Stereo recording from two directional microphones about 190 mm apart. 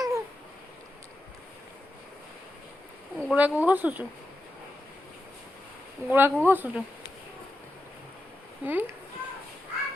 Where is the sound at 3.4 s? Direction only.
10° right (ahead or behind).